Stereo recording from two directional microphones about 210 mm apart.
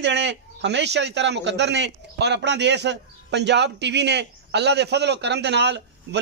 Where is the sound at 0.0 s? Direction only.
55° right (ahead or behind).